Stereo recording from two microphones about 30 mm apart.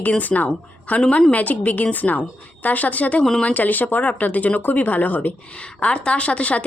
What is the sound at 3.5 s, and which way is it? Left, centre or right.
Speech, left.